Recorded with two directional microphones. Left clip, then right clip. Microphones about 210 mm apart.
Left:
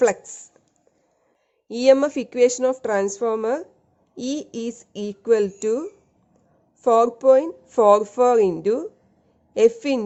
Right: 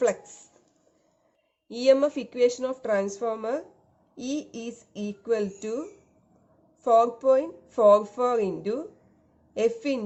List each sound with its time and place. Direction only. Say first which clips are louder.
0.0 s a woman's voice: left 6 dB; 50° left (ahead or behind)
1.6 s a woman's voice: left 5 dB; 50° left (ahead or behind)
6.8 s a woman's voice: left 5 dB; 50° left (ahead or behind)